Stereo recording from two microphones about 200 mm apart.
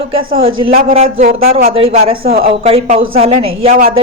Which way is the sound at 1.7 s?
30° right (ahead or behind).